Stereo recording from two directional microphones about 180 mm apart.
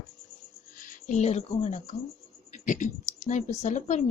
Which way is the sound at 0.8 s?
40° left (ahead or behind).